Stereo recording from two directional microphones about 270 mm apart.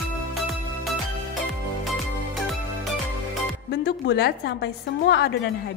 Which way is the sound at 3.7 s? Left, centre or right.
Left.